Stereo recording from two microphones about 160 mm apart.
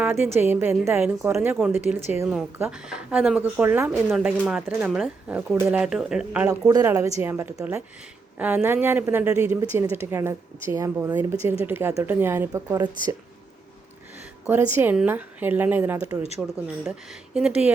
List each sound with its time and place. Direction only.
0.0 s a woman's voice: 15° right (ahead or behind)
2.3 s speech: 5° right (ahead or behind)
6.5 s speech: 20° right (ahead or behind)
14.4 s speech: 10° right (ahead or behind)
16.4 s speech: centre (ahead or behind)